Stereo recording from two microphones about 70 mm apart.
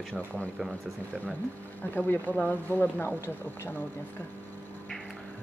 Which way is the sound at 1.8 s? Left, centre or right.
Left.